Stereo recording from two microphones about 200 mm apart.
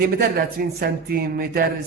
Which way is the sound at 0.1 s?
50° right (ahead or behind).